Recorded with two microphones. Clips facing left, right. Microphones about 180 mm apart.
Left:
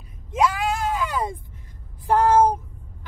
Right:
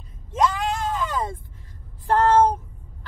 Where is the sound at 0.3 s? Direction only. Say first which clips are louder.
Left 1 dB; 5° left (ahead or behind).